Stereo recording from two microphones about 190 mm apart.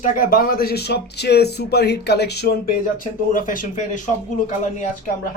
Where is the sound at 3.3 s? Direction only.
45° left (ahead or behind).